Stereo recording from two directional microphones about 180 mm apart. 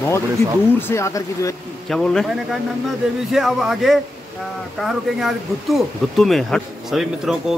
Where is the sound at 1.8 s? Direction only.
5° left (ahead or behind).